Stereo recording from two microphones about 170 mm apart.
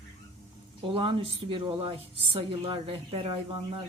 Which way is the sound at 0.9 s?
30° right (ahead or behind).